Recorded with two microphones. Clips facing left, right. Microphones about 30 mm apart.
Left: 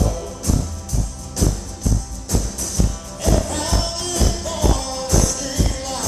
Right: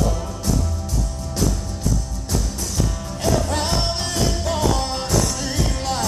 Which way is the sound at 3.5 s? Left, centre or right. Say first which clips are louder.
Right 1 dB; right.